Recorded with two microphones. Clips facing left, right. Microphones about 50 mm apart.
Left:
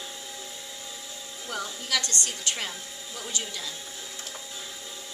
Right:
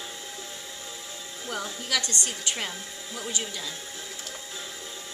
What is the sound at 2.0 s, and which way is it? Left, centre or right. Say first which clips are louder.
Speech: left 1 dB; right.